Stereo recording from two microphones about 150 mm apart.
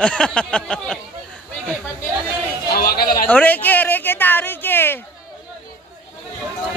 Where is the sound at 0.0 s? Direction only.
5° left (ahead or behind).